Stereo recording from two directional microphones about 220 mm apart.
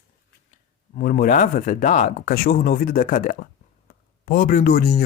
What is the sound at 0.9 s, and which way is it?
Speech, 40° left (ahead or behind).